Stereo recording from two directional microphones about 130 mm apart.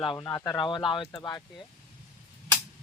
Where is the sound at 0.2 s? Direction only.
25° left (ahead or behind).